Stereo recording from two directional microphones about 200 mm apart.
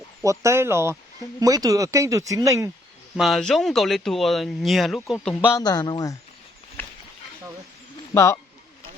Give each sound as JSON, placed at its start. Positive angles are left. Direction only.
{"t": 0.2, "sound": "speech", "side_deg": -15}
{"t": 3.2, "sound": "speech", "side_deg": 0}
{"t": 8.1, "sound": "speech", "side_deg": 15}